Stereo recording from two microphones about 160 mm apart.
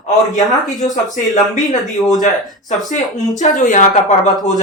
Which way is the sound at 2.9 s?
50° left (ahead or behind).